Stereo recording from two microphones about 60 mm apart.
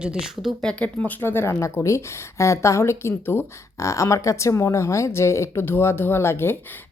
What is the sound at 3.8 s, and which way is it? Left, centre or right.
A woman's voice, left.